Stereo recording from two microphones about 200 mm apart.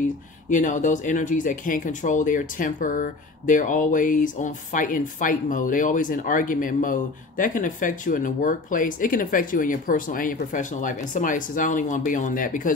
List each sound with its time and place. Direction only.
0.5 s speech: 40° left (ahead or behind)